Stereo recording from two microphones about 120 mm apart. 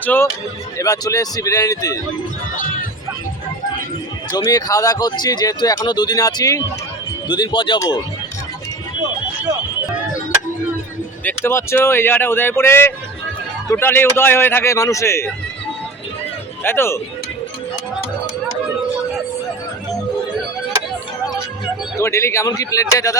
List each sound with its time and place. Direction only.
0.0 s speech: 15° left (ahead or behind)
0.8 s speech: 30° left (ahead or behind)
4.3 s speech: 30° left (ahead or behind)
11.2 s speech: 15° left (ahead or behind)
16.6 s speech: 20° left (ahead or behind)
21.9 s speech: 25° left (ahead or behind)